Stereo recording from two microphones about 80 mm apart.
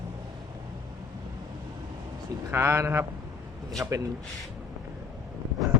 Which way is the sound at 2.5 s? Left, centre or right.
Right.